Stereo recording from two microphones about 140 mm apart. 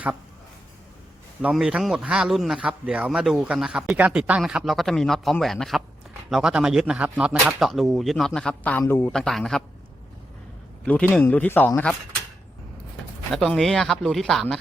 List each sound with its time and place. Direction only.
1.4 s a man's voice: 10° right (ahead or behind); by 9.1 s 20° left (ahead or behind)
9.1 s a man's voice: 5° left (ahead or behind)
10.8 s speech: 10° left (ahead or behind)
13.3 s a man's voice: centre (ahead or behind)